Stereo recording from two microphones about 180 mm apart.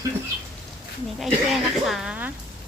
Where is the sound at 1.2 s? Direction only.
Centre (ahead or behind).